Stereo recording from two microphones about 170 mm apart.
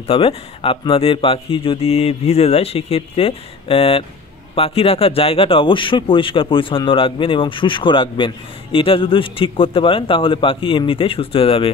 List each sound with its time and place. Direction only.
0.0 s speech: 35° left (ahead or behind)